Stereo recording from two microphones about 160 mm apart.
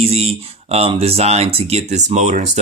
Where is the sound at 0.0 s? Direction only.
40° right (ahead or behind).